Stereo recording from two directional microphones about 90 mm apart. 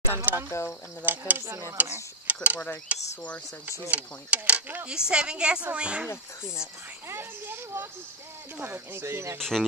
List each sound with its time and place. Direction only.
0.1 s insect: 20° right (ahead or behind)
1.0 s speech: 20° right (ahead or behind)
2.2 s a sound: 15° right (ahead or behind)
2.9 s a woman's voice: 15° right (ahead or behind)
7.1 s speech: 25° right (ahead or behind)
9.4 s speech: 5° left (ahead or behind)